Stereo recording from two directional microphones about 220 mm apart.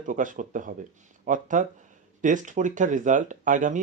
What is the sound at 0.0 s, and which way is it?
Speech, 35° right (ahead or behind).